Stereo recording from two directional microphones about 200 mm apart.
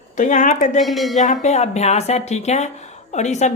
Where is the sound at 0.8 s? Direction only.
Centre (ahead or behind).